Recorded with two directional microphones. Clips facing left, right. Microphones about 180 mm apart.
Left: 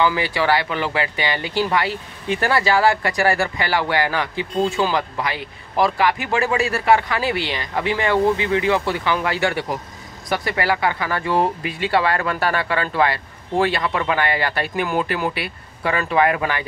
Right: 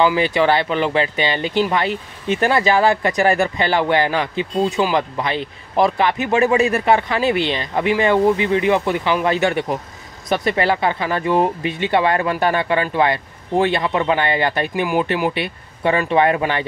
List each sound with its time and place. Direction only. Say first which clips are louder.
0.0 s speech: right 4 dB; 20° right (ahead or behind)